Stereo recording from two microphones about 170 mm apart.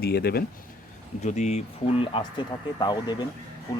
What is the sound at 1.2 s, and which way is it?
Speech, 40° left (ahead or behind).